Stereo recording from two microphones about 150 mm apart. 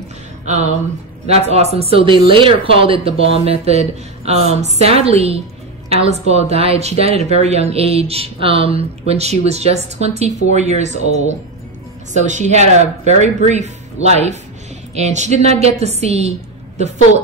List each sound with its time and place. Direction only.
1.2 s a woman's voice: 45° right (ahead or behind)